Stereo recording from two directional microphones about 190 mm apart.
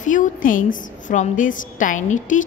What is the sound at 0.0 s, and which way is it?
A woman's voice, 40° left (ahead or behind).